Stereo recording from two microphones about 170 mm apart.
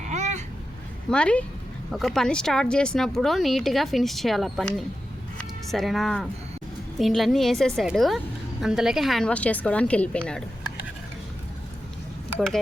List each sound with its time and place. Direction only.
0.0 s vehicle: 45° right (ahead or behind)
1.1 s speech: 5° left (ahead or behind)